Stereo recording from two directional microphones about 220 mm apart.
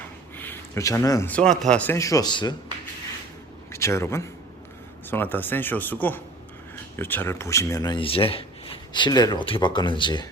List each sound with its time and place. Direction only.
0.3 s speech: 10° left (ahead or behind)
3.7 s a man's voice: 10° left (ahead or behind)